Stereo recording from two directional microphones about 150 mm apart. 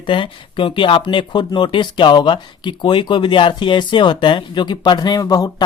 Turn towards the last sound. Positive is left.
turn(degrees=25)  # may be behind; listen again after turning